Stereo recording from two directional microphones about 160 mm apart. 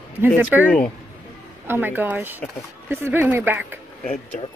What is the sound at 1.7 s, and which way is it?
Speech, 10° right (ahead or behind).